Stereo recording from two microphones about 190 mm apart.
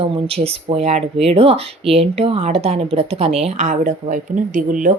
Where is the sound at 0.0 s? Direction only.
30° right (ahead or behind).